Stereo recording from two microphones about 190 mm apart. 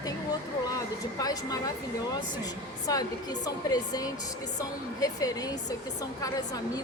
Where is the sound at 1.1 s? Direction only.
20° left (ahead or behind).